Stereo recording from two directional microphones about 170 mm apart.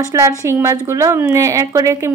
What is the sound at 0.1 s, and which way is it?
A woman's voice, 15° right (ahead or behind).